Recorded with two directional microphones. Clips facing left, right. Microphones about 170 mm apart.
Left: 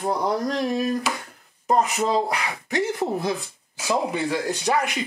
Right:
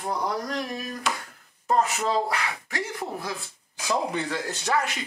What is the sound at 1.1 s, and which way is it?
Speech, 5° left (ahead or behind).